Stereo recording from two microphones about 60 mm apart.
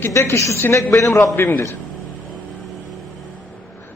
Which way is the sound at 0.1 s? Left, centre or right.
Left.